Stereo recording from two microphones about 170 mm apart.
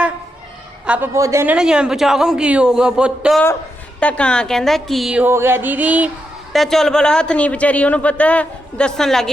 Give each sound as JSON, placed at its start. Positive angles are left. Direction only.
{"t": 0.9, "sound": "a woman's voice", "side_deg": -10}
{"t": 1.5, "sound": "speech", "side_deg": -5}
{"t": 6.5, "sound": "speech", "side_deg": 0}